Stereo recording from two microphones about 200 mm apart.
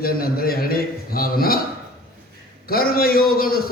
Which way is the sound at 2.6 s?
50° left (ahead or behind).